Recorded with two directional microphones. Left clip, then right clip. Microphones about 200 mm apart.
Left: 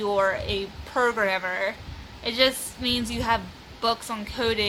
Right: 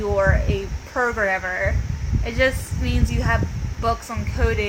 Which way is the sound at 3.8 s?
5° left (ahead or behind).